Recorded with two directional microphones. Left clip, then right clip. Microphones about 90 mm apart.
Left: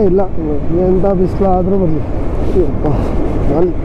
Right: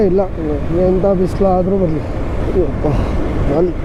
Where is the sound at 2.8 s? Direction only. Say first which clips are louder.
Left 2 dB; 25° right (ahead or behind).